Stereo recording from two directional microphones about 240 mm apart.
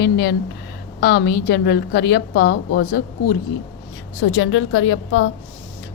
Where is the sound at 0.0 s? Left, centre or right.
Left.